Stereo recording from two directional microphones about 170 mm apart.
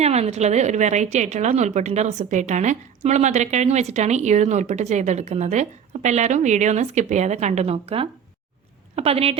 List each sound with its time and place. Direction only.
0.0 s a woman's voice: 40° right (ahead or behind)